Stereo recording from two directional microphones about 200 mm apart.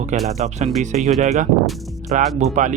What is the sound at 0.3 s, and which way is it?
Speech, 35° right (ahead or behind).